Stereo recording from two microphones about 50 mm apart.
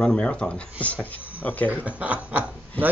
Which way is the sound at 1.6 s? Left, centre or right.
Right.